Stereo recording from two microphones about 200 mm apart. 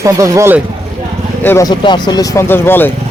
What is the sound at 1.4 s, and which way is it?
Speech, 10° left (ahead or behind).